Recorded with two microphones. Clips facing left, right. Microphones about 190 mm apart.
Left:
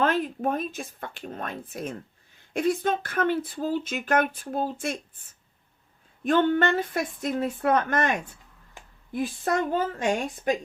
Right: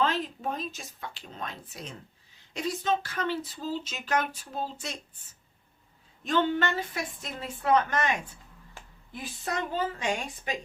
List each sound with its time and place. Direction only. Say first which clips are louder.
0.0 s a woman's voice: left 4 dB; 55° left (ahead or behind)
8.8 s a sound: left 1 dB; 15° left (ahead or behind)
9.1 s speech: left 8 dB; 50° left (ahead or behind)